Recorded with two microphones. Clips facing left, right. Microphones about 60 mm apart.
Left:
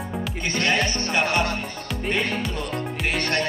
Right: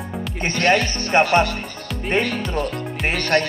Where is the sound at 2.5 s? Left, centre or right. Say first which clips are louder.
Right 4 dB; right.